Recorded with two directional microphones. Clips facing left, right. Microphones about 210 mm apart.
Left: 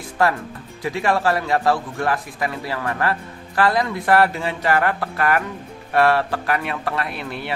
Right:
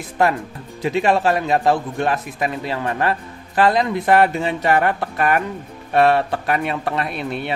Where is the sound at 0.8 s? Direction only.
20° right (ahead or behind).